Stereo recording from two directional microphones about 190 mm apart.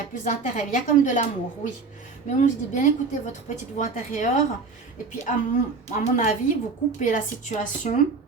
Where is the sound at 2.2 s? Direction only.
40° left (ahead or behind).